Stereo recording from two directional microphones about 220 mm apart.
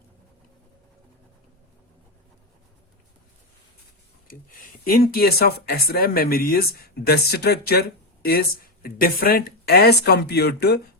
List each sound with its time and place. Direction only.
4.9 s speech: 40° left (ahead or behind)